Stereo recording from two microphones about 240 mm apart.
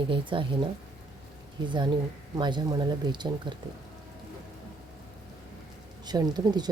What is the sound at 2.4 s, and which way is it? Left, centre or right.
Speech, centre.